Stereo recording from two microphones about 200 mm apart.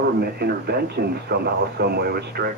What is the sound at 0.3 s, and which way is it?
Speech, 50° right (ahead or behind).